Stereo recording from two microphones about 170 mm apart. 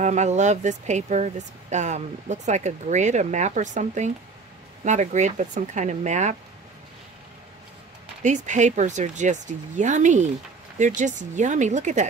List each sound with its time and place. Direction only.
0.0 s speech: 45° right (ahead or behind)
8.2 s speech: 45° right (ahead or behind)